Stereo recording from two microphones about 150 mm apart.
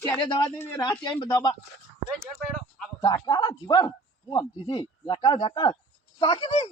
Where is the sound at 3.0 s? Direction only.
25° left (ahead or behind).